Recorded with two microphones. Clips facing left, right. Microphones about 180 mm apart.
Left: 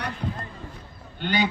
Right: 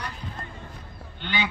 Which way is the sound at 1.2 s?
40° left (ahead or behind).